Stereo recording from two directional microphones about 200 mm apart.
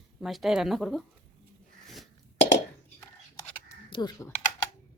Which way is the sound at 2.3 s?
65° left (ahead or behind).